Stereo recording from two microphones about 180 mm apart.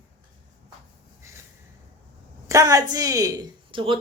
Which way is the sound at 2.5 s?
20° right (ahead or behind).